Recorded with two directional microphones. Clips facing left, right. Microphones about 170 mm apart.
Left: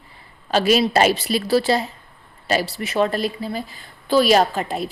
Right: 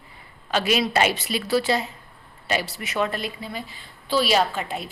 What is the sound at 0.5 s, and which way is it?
A woman's voice, 35° left (ahead or behind).